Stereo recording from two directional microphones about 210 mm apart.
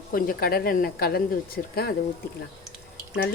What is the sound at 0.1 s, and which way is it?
A woman's voice, 45° left (ahead or behind).